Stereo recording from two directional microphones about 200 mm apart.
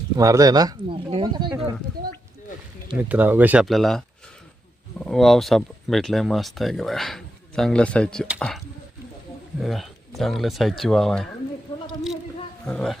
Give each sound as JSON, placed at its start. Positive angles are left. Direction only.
{"t": 0.2, "sound": "speech", "side_deg": -15}
{"t": 3.1, "sound": "speech", "side_deg": -10}
{"t": 11.9, "sound": "a sound", "side_deg": 0}
{"t": 12.6, "sound": "speech", "side_deg": 5}